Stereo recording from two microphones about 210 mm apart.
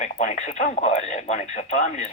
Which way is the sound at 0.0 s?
35° left (ahead or behind).